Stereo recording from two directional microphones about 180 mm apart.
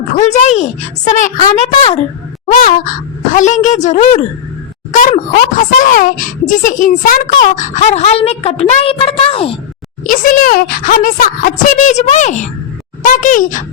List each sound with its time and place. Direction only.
0.1 s a woman's voice: 40° left (ahead or behind)
2.6 s speech: 50° left (ahead or behind)
4.9 s a sound: 45° left (ahead or behind)
5.5 s a woman's voice: 50° left (ahead or behind); by 9.6 s 30° left (ahead or behind)
10.0 s speech: 50° left (ahead or behind)